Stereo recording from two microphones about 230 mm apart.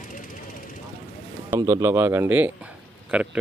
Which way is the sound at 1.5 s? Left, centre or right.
Centre.